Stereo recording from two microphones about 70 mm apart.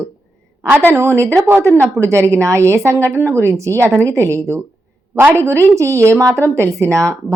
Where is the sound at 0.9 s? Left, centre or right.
Right.